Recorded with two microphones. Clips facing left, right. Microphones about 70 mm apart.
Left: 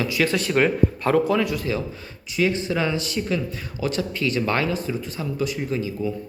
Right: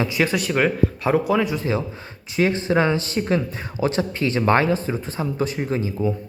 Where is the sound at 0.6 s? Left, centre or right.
Centre; by 6.1 s right.